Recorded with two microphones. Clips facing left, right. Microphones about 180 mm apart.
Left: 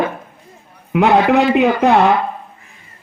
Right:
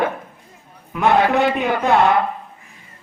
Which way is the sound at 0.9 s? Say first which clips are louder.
Left 4 dB; 70° left (ahead or behind).